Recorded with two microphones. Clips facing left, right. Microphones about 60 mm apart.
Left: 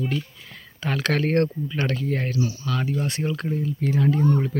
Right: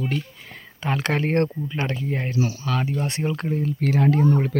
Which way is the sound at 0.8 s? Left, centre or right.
Right.